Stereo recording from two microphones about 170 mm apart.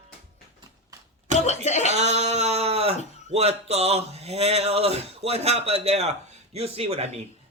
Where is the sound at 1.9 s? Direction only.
40° right (ahead or behind).